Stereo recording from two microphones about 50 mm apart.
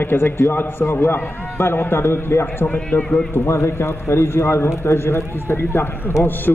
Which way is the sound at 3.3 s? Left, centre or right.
Left.